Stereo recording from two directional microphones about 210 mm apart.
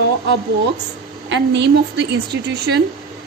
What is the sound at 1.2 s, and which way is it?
A woman's voice, 60° right (ahead or behind).